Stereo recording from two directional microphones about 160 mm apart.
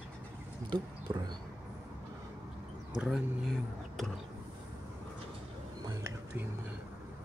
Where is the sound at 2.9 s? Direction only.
Centre (ahead or behind).